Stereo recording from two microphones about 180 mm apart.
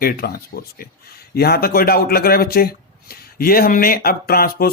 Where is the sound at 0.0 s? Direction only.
55° left (ahead or behind).